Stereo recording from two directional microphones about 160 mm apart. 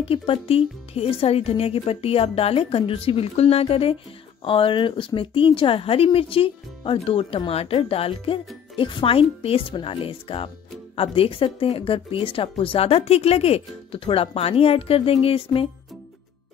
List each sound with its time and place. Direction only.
0.0 s speech: 35° left (ahead or behind)